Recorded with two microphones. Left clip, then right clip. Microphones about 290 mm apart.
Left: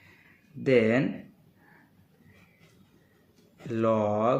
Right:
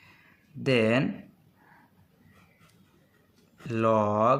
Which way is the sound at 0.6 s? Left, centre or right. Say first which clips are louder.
Left 1 dB; right.